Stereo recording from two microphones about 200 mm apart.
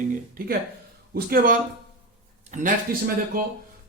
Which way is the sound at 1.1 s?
45° right (ahead or behind).